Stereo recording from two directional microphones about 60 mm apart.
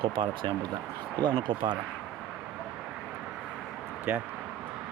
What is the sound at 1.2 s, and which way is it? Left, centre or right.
Speech, left.